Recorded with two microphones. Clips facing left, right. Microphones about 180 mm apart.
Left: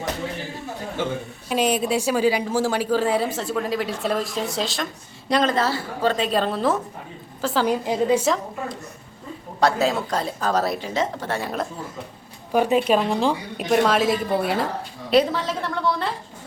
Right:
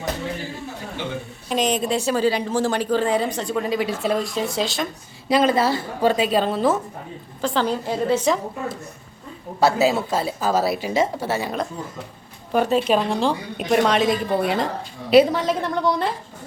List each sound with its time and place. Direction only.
1.5 s a woman's voice: 10° left (ahead or behind)
8.2 s a woman's voice: centre (ahead or behind)
15.1 s a woman's voice: 10° right (ahead or behind)